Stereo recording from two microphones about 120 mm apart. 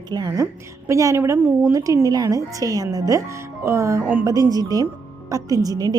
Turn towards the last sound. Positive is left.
turn(degrees=-30)  # may be behind; listen again after turning